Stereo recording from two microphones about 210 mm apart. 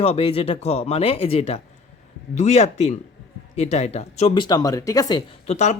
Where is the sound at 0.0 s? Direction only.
30° left (ahead or behind).